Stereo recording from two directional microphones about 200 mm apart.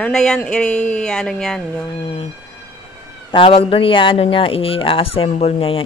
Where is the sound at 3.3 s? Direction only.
30° left (ahead or behind).